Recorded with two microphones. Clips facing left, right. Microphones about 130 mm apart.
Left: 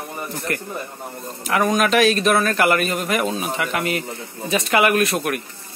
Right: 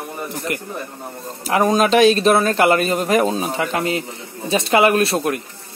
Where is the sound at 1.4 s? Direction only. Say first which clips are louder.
Right 3 dB; 30° right (ahead or behind).